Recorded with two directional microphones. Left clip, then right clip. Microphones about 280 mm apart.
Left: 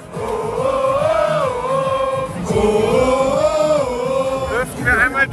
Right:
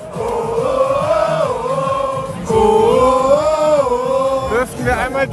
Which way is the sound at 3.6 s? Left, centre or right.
Right.